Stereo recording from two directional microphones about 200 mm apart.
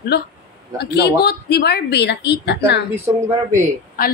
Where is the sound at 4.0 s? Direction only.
45° left (ahead or behind).